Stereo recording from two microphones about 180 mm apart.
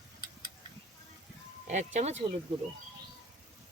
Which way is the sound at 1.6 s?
40° right (ahead or behind).